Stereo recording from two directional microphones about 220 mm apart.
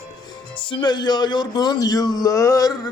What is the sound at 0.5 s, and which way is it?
Speech, 20° left (ahead or behind).